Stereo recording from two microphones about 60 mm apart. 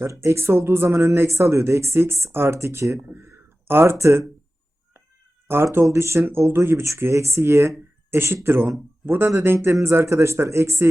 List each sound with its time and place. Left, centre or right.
0.1 s speech: right
3.1 s speech: right
5.7 s speech: right